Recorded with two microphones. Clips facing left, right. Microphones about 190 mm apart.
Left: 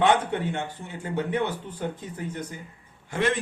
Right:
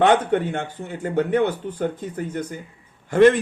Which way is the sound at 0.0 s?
50° right (ahead or behind).